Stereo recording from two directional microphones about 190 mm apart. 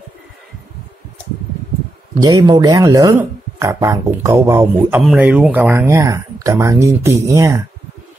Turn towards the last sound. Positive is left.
turn(degrees=-15)  # may be behind; listen again after turning